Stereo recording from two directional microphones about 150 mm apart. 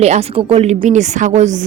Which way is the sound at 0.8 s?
55° right (ahead or behind).